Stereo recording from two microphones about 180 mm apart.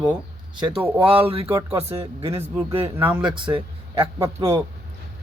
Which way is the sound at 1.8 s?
35° right (ahead or behind).